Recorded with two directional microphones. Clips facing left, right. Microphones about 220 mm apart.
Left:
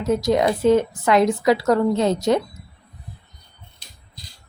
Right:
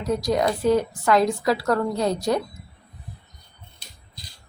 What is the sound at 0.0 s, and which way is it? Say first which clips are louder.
A woman's voice: left 4 dB; 25° left (ahead or behind).